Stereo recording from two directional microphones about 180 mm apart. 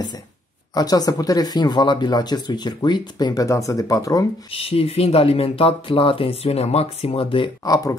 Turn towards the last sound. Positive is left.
turn(degrees=20)  # may be behind; listen again after turning